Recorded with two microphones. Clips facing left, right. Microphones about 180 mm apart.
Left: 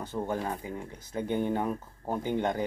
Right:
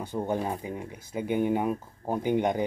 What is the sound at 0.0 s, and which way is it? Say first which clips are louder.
Speech: right 3 dB; 15° right (ahead or behind).